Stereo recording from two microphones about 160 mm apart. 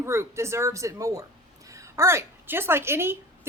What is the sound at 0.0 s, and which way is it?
A woman's voice, 15° right (ahead or behind).